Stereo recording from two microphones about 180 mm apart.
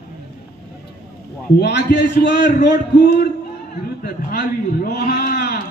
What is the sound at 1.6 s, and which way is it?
A man's voice, 70° left (ahead or behind).